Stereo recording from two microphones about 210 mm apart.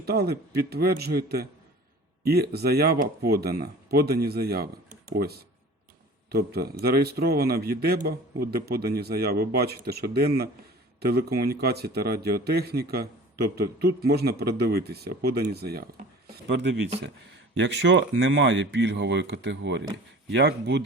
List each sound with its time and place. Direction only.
0.0 s a man's voice: 50° right (ahead or behind)